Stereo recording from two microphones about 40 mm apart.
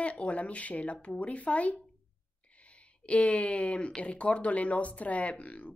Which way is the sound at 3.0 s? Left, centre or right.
Left.